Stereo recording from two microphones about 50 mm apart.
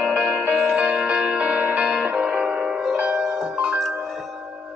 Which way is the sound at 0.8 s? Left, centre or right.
Right.